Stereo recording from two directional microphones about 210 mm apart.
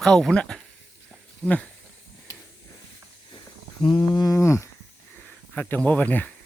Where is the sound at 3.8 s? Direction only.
25° left (ahead or behind).